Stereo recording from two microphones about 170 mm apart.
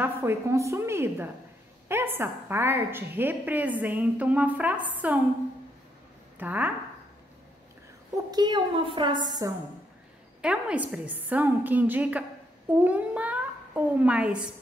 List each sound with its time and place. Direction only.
0.0 s a woman's voice: 15° right (ahead or behind)
6.3 s a woman's voice: 10° right (ahead or behind)
8.3 s a woman's voice: 25° right (ahead or behind)
10.4 s a woman's voice: 5° right (ahead or behind)